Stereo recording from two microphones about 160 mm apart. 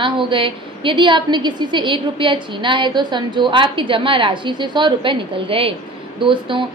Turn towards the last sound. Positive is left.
turn(degrees=-30)  # may be behind; listen again after turning